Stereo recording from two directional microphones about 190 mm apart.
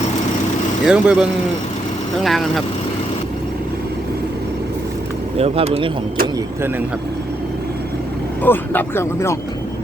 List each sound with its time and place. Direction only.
0.9 s speech: 5° right (ahead or behind)
5.4 s speech: 30° right (ahead or behind)
8.4 s speech: 10° left (ahead or behind)